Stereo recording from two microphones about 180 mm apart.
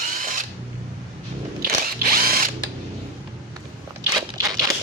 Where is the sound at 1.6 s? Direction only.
55° right (ahead or behind).